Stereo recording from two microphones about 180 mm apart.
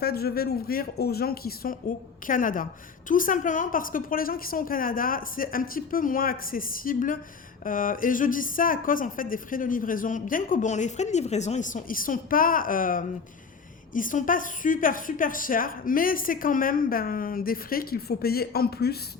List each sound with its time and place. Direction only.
0.0 s a woman's voice: 60° left (ahead or behind)